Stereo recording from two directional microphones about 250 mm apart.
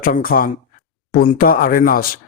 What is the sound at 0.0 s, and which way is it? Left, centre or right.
Speech, left.